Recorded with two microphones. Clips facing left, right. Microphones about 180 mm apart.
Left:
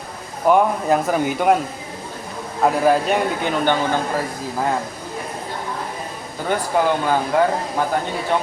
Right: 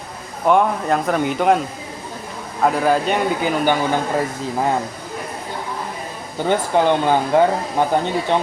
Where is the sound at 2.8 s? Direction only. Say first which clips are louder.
Left 1 dB; centre (ahead or behind).